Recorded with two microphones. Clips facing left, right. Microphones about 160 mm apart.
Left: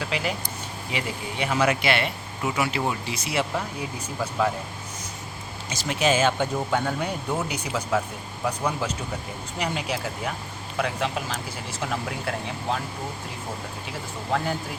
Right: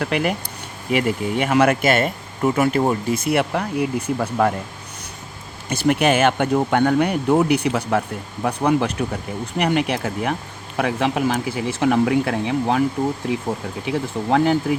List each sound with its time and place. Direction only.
0.0 s speech: 55° right (ahead or behind)
5.6 s speech: 60° right (ahead or behind)
13.8 s speech: 65° right (ahead or behind)